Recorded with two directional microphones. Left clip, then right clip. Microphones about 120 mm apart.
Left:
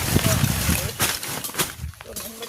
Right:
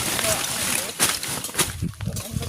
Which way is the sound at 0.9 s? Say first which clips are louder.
Right 1 dB; 25° right (ahead or behind).